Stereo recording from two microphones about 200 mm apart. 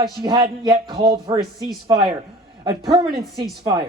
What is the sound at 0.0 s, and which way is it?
A man's voice, 20° right (ahead or behind).